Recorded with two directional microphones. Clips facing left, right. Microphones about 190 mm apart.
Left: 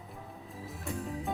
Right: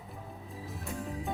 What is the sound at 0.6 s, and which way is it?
Music, centre (ahead or behind).